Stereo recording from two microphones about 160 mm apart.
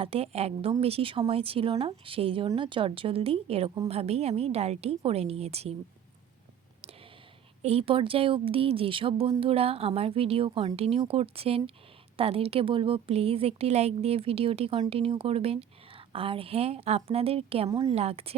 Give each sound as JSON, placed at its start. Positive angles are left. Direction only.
{"t": 0.0, "sound": "a woman's voice", "side_deg": -40}
{"t": 7.6, "sound": "a woman's voice", "side_deg": -40}